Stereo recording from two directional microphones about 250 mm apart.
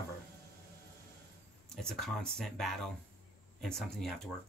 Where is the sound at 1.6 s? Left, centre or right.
Centre.